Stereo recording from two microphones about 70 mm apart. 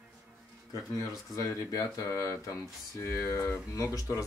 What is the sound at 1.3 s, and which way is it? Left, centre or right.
Speech, left.